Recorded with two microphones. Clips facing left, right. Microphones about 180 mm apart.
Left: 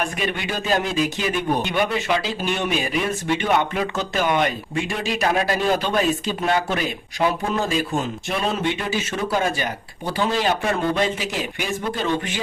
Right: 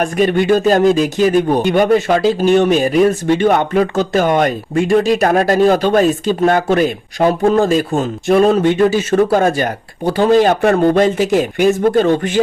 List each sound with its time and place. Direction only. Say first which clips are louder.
0.0 s speech: right 12 dB; 45° right (ahead or behind)